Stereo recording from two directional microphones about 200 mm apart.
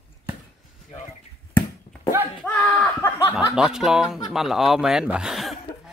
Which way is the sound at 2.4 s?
5° left (ahead or behind).